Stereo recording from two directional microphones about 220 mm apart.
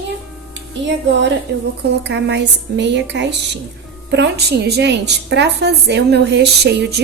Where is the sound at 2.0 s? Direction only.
50° right (ahead or behind).